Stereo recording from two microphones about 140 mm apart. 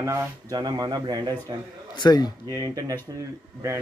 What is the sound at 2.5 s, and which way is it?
Speech, 25° right (ahead or behind).